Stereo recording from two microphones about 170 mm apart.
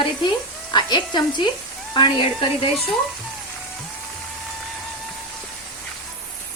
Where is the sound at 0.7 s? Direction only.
25° left (ahead or behind).